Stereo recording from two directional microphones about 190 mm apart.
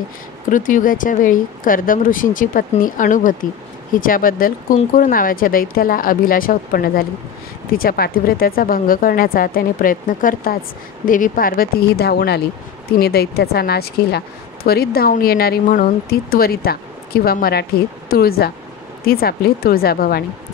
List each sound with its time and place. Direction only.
0.5 s a woman's voice: 45° left (ahead or behind)